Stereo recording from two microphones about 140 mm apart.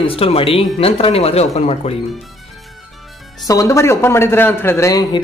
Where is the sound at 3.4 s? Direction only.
20° left (ahead or behind).